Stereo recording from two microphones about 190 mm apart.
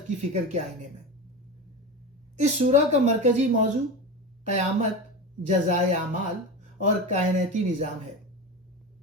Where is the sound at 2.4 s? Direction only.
35° right (ahead or behind).